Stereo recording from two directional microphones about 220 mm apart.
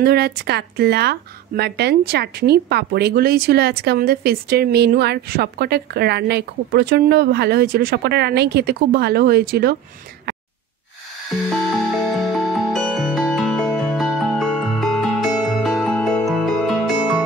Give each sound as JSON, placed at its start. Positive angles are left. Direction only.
{"t": 0.0, "sound": "a woman's voice", "side_deg": -45}
{"t": 11.9, "sound": "music", "side_deg": 0}